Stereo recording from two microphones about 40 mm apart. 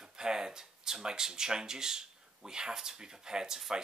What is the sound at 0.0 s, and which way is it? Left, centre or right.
Speech, centre.